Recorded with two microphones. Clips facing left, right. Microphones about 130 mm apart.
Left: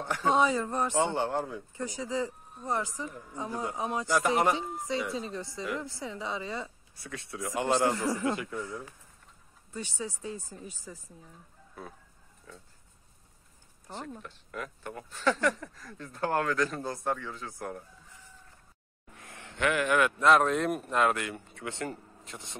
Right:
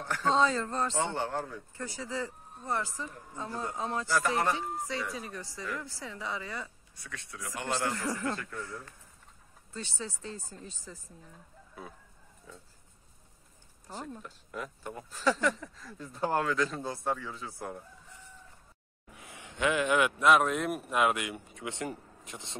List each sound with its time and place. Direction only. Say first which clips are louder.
0.0 s a man's voice: left 1 dB; 15° left (ahead or behind)
13.8 s speech: left 1 dB; 5° right (ahead or behind)
19.1 s speech: left 1 dB; 10° right (ahead or behind)